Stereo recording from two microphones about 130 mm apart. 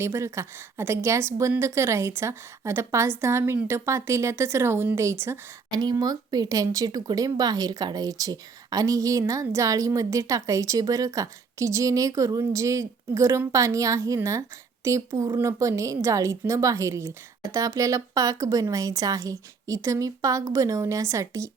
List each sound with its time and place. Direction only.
0.0 s speech: 20° right (ahead or behind)
5.7 s speech: 30° right (ahead or behind)